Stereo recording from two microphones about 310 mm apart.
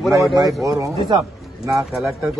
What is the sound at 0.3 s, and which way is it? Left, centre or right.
A man's voice, centre.